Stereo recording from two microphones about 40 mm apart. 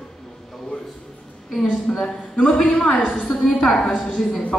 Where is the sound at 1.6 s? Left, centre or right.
Centre.